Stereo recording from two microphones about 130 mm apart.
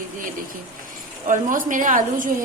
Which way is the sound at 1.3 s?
90° right.